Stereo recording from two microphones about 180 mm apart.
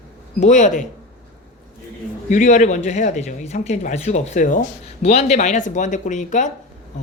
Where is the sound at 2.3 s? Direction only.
45° left (ahead or behind).